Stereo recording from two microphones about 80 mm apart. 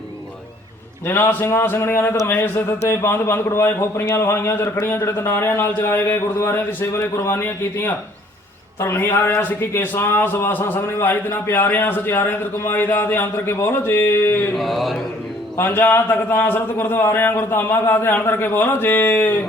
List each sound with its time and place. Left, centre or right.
1.0 s a man's voice: left
14.6 s mantra: centre
15.5 s a man's voice: left